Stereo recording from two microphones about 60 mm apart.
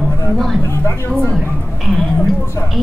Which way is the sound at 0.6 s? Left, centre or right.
Left.